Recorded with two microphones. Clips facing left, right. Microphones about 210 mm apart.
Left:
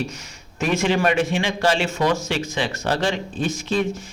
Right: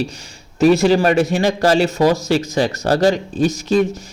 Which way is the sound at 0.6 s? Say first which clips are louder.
Right 8 dB; 40° right (ahead or behind).